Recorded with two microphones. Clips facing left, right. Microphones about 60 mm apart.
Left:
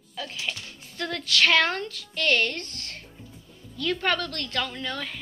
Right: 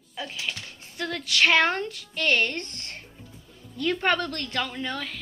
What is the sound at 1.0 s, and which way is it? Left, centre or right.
A woman's voice, centre.